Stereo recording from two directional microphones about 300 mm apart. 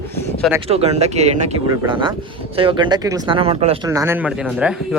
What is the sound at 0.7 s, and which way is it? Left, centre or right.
Speech, right.